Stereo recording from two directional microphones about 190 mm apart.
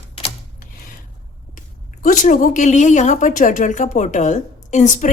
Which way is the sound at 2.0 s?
45° left (ahead or behind).